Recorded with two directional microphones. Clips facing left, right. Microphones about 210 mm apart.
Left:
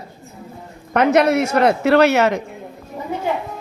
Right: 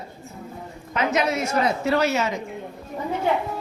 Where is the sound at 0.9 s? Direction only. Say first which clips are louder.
Left 8 dB; 65° left (ahead or behind).